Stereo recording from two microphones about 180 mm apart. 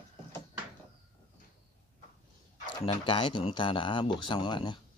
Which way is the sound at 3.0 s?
30° left (ahead or behind).